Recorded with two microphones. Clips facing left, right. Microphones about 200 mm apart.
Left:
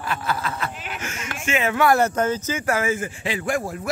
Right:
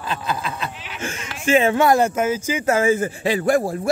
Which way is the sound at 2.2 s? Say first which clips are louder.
Right 2 dB; 10° right (ahead or behind).